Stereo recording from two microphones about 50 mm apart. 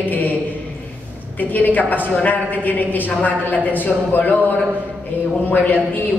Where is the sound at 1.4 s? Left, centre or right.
Left.